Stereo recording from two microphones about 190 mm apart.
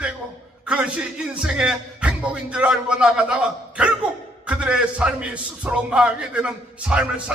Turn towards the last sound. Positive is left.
turn(degrees=-5)  # may be behind; listen again after turning